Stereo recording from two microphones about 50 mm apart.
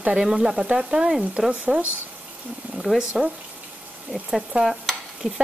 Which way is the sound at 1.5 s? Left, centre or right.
Right.